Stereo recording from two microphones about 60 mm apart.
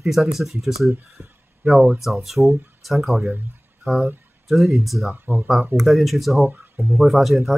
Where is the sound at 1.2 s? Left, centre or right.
Right.